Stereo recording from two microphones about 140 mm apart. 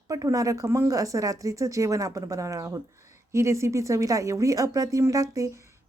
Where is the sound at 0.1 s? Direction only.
25° right (ahead or behind).